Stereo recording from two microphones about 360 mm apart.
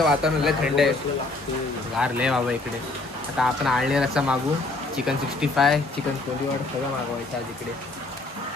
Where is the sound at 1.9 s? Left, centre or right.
Centre.